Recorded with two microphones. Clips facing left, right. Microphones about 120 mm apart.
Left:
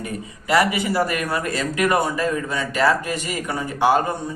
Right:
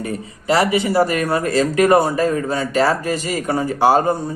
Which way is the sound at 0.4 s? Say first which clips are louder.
Right 3 dB; 30° right (ahead or behind).